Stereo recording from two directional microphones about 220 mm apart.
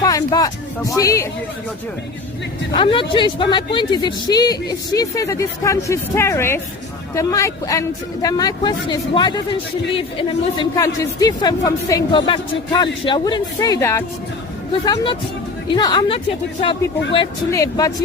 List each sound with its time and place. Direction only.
0.0 s speech: 15° left (ahead or behind)
2.7 s speech: 25° left (ahead or behind)